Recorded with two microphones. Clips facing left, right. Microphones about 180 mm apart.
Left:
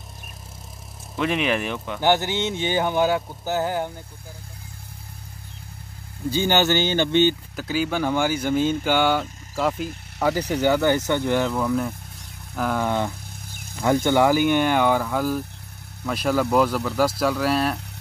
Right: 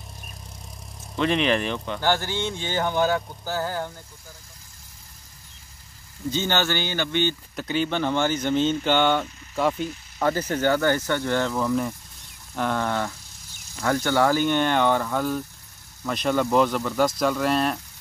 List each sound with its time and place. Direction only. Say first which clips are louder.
1.1 s speech: right 1 dB; 10° left (ahead or behind)
6.3 s speech: left 5 dB; 15° left (ahead or behind)
7.5 s speech: left 1 dB; 5° left (ahead or behind)
11.5 s speech: left 1 dB; 5° left (ahead or behind)
13.5 s a sound: left 3 dB; 55° left (ahead or behind)
13.8 s speech: left 3 dB; 20° left (ahead or behind); by 17.7 s 5° left (ahead or behind)